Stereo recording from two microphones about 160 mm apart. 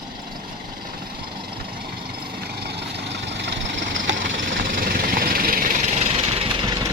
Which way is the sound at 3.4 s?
90° right.